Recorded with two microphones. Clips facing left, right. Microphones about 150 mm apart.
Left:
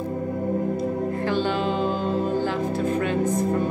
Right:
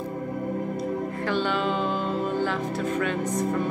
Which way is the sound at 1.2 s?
35° left (ahead or behind).